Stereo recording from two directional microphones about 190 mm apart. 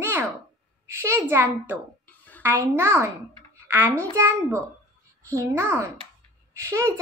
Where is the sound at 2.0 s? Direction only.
10° left (ahead or behind).